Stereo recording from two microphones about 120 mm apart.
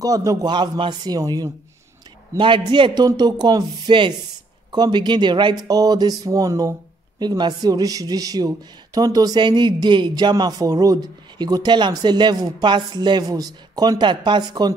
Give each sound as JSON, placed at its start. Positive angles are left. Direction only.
{"t": 0.0, "sound": "a man's voice", "side_deg": -30}
{"t": 2.3, "sound": "a man's voice", "side_deg": -45}